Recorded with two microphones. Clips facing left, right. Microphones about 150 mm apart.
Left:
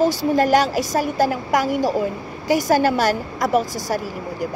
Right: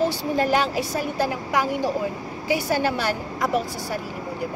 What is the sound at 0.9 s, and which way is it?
Speech, 55° left (ahead or behind).